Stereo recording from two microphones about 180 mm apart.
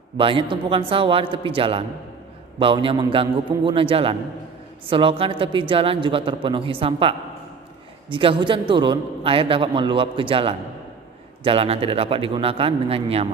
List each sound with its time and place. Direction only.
0.2 s a man's voice: 30° right (ahead or behind)